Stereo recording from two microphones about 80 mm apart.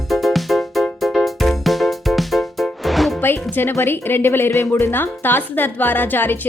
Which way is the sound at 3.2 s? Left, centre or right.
Left.